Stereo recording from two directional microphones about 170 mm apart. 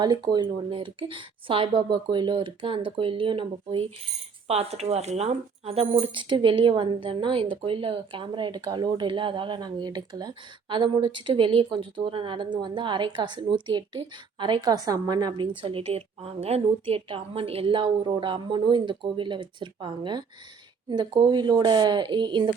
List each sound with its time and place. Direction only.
0.3 s speech: 30° right (ahead or behind)